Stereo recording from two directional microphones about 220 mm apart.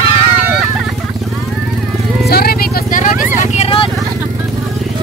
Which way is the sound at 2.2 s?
45° left (ahead or behind).